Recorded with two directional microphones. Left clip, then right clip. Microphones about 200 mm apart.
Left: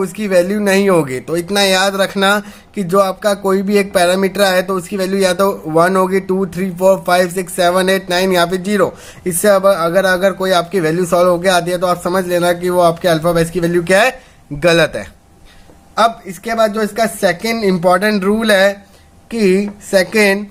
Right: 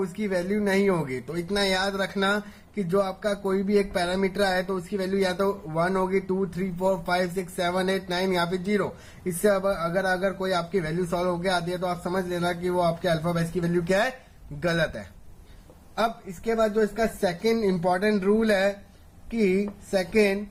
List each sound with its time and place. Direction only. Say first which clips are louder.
0.0 s speech: left 14 dB; 45° left (ahead or behind)
16.5 s speech: left 9 dB; 50° left (ahead or behind)